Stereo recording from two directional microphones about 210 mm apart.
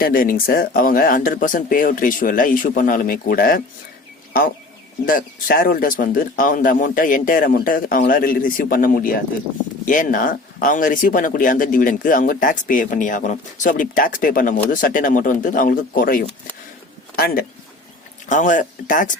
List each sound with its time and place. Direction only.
0.0 s speech: 40° left (ahead or behind)
5.0 s speech: 40° left (ahead or behind)